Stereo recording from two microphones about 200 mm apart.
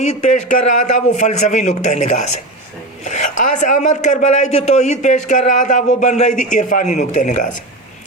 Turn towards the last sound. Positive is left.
turn(degrees=40)  # may be behind; listen again after turning